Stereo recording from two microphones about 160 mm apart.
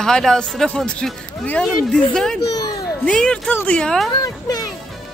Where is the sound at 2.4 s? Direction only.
25° left (ahead or behind).